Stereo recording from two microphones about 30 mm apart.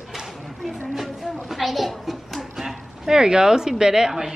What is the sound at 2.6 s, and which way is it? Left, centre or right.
A woman's voice, centre.